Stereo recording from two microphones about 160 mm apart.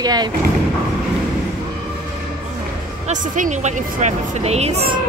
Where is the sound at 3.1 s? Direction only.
50° right (ahead or behind).